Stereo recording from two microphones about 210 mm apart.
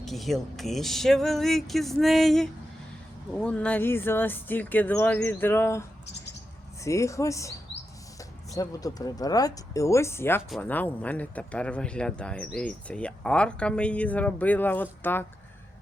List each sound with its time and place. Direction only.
0.0 s speech: centre (ahead or behind)
6.8 s speech: 15° left (ahead or behind)
8.5 s speech: 15° left (ahead or behind)